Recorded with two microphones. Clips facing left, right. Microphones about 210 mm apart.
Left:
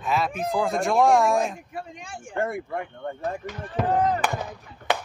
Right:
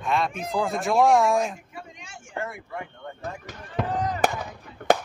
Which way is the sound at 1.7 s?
55° left (ahead or behind).